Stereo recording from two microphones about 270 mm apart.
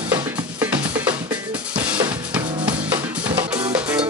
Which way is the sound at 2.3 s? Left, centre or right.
Centre.